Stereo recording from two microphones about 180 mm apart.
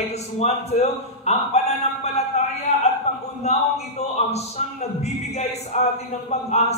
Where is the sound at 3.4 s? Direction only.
35° left (ahead or behind).